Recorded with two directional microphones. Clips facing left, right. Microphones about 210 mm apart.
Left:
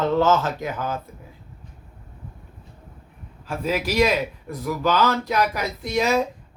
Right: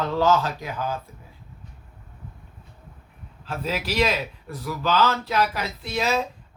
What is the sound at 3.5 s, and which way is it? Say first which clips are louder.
Speech: left 4 dB; 10° left (ahead or behind).